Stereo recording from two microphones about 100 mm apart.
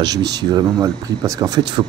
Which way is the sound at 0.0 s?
45° right (ahead or behind).